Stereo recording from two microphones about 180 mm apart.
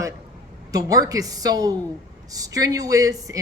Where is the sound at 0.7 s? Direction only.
20° right (ahead or behind).